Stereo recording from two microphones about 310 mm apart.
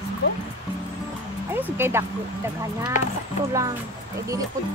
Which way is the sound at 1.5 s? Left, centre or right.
Centre.